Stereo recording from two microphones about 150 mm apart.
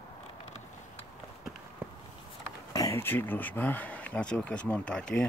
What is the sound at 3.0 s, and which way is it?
Speech, 15° left (ahead or behind).